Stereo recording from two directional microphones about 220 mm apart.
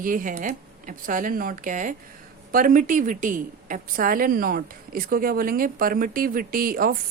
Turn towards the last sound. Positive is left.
turn(degrees=-40)  # may be behind; listen again after turning